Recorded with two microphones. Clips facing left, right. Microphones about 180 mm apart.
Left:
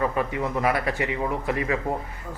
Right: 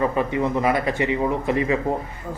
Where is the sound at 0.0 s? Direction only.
25° right (ahead or behind).